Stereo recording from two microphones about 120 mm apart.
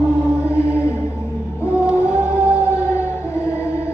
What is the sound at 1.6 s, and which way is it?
Music, 20° left (ahead or behind).